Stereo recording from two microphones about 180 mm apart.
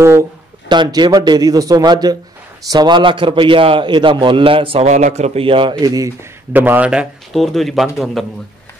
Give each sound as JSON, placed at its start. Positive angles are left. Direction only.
{"t": 0.7, "sound": "a man's voice", "side_deg": -25}